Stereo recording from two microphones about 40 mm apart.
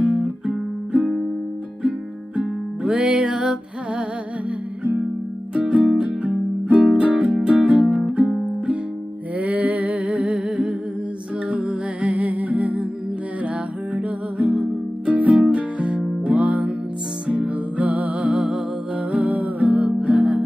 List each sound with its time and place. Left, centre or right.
0.0 s music: right
5.5 s music: right
7.5 s music: right
9.4 s a sound: right
11.4 s music: right
13.9 s music: right
19.1 s music: right